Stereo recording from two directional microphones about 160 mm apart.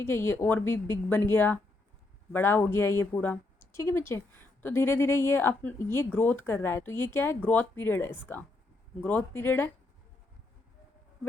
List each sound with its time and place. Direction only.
0.0 s speech: 15° left (ahead or behind)